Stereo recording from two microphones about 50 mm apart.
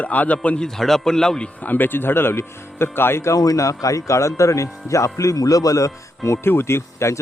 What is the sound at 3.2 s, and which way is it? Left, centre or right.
Speech, left.